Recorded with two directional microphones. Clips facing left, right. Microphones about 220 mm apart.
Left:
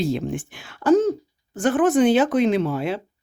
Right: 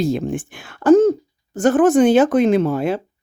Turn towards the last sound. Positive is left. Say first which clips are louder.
# right 5 dB
turn(degrees=-45)  # may be behind; listen again after turning